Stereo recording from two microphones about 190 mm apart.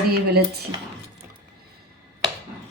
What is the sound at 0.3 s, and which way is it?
Speech, 55° right (ahead or behind).